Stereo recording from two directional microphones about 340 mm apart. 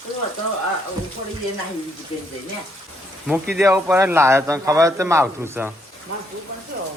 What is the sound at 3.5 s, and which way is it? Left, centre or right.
Speech, centre.